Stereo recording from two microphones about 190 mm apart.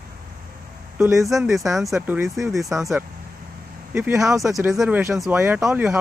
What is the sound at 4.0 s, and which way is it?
Speech, 10° right (ahead or behind).